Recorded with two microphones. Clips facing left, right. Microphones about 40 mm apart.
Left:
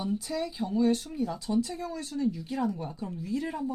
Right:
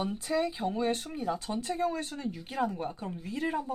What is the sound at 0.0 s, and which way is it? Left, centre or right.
Speech, right.